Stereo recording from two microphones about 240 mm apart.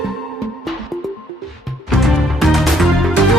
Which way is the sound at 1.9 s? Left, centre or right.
Centre.